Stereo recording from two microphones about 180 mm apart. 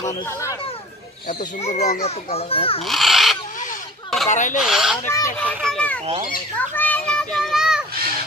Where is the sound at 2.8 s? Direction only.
Centre (ahead or behind).